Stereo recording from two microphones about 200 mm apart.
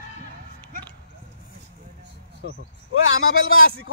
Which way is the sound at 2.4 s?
70° left (ahead or behind).